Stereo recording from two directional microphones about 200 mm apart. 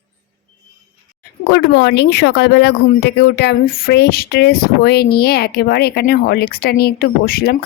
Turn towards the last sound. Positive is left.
turn(degrees=50)  # may be behind; listen again after turning